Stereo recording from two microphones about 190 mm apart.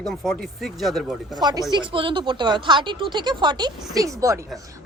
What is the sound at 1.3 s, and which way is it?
A woman's voice, 20° right (ahead or behind).